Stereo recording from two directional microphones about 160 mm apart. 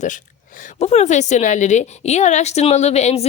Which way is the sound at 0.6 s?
45° left (ahead or behind).